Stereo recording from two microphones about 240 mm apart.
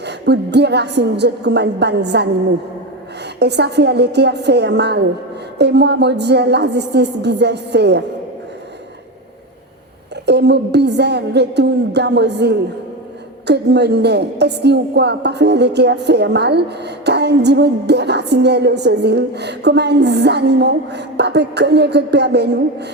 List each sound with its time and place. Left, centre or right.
0.0 s a woman's voice: right
3.3 s a woman's voice: right
10.2 s a woman's voice: right